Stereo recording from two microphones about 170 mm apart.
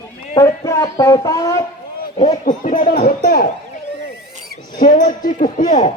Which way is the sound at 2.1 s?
40° left (ahead or behind).